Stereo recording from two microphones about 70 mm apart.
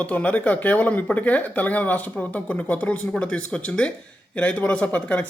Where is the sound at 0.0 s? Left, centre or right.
Centre.